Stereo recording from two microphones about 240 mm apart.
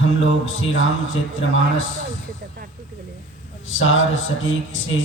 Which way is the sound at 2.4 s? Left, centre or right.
Right.